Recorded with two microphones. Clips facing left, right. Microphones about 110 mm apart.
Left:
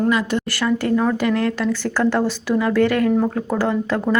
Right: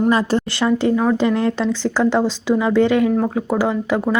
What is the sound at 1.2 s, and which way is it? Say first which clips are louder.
Speech: right 2 dB; 25° right (ahead or behind).